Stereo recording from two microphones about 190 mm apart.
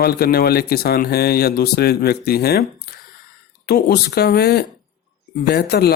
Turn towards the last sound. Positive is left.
turn(degrees=55)  # may be behind; listen again after turning